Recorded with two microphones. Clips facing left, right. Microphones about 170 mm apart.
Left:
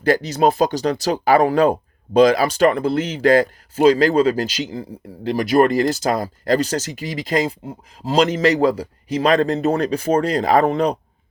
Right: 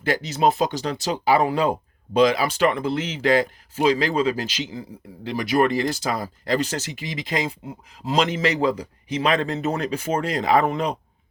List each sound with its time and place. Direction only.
0.0 s a man's voice: 40° left (ahead or behind)